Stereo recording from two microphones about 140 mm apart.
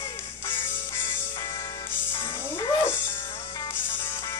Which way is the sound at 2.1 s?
20° left (ahead or behind).